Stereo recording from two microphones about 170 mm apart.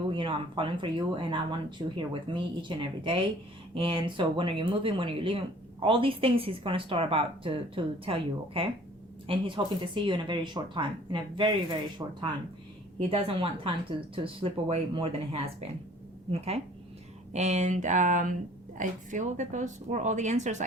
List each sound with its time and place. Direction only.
0.1 s speech: 30° right (ahead or behind)
13.0 s a woman's voice: 35° right (ahead or behind)